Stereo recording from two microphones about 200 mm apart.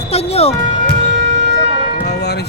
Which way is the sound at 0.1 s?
30° left (ahead or behind).